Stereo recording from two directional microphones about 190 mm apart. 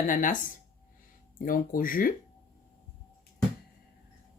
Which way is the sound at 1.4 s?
50° left (ahead or behind).